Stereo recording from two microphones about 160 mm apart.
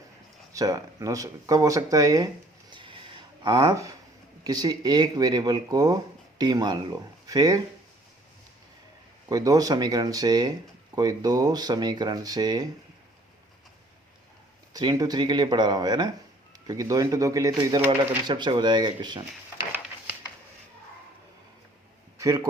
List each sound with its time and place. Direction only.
0.5 s speech: 20° right (ahead or behind)
2.7 s a sound: 30° right (ahead or behind)
4.4 s speech: 25° right (ahead or behind)
9.3 s speech: 25° right (ahead or behind)
14.7 s speech: 25° right (ahead or behind)
18.3 s speech: 30° right (ahead or behind)
19.5 s a sound: 10° right (ahead or behind)
22.2 s speech: 20° right (ahead or behind)